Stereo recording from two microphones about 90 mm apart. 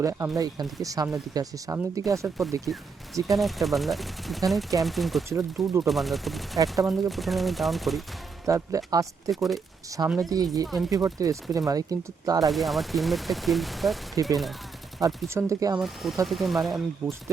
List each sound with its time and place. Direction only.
0.0 s speech: 35° right (ahead or behind)
3.3 s speech: centre (ahead or behind)
5.3 s speech: 35° right (ahead or behind)
5.9 s speech: centre (ahead or behind)
6.6 s speech: 40° right (ahead or behind)
7.1 s speech: centre (ahead or behind)
8.4 s speech: 40° right (ahead or behind)
9.3 s speech: centre (ahead or behind)
10.2 s speech: 45° right (ahead or behind)
12.5 s speech: centre (ahead or behind)
15.3 s speech: 35° right (ahead or behind)
16.2 s speech: centre (ahead or behind)
17.0 s speech: 30° right (ahead or behind)